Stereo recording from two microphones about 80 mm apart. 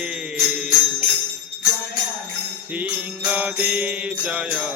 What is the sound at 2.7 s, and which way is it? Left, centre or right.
Mantra, centre.